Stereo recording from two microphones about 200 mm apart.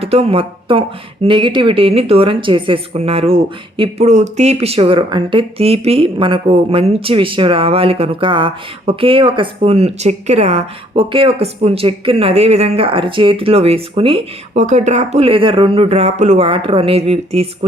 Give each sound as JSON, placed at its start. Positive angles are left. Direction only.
{"t": 0.0, "sound": "speech", "side_deg": -30}